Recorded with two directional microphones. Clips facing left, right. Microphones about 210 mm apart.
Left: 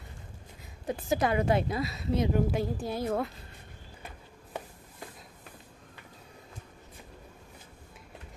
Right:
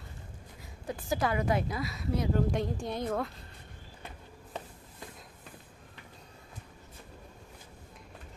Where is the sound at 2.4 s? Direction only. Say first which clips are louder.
Left 1 dB; 5° left (ahead or behind).